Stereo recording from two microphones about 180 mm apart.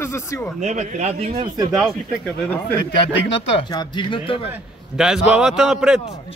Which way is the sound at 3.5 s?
25° left (ahead or behind).